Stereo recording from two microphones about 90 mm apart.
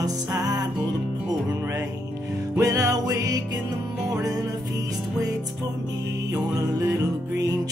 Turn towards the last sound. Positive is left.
turn(degrees=-40)  # may be behind; listen again after turning